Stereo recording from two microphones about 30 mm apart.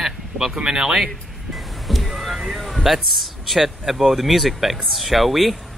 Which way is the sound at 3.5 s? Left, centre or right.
Centre.